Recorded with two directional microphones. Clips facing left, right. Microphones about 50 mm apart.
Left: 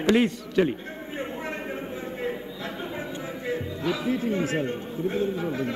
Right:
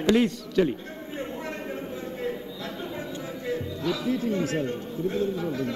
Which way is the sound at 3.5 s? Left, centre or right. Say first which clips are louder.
Even; left.